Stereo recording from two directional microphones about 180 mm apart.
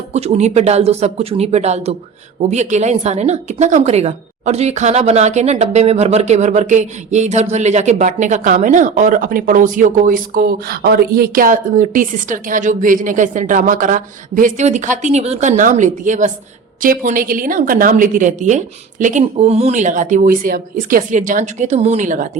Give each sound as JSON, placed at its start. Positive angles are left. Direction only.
{"t": 0.1, "sound": "a woman's voice", "side_deg": -35}